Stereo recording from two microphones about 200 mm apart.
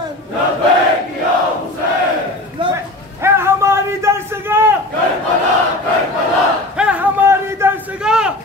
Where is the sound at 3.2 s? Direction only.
15° right (ahead or behind).